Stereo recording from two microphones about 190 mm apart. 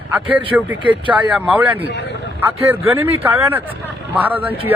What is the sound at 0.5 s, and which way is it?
Speech, 10° right (ahead or behind).